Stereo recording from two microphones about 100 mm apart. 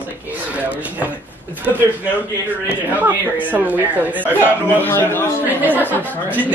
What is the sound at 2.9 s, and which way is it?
A woman's voice, 20° right (ahead or behind).